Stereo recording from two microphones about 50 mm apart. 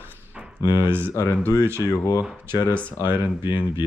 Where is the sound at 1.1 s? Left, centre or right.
Left.